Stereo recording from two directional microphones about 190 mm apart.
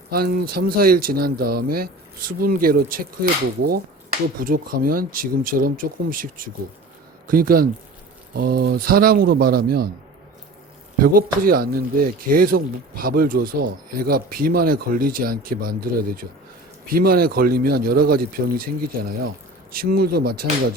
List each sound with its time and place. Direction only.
0.1 s speech: 50° right (ahead or behind)
4.4 s speech: 50° right (ahead or behind)
11.0 s speech: 50° right (ahead or behind)